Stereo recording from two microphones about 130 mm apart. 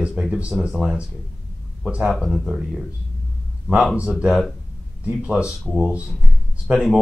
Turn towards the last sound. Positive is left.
turn(degrees=-5)  # may be behind; listen again after turning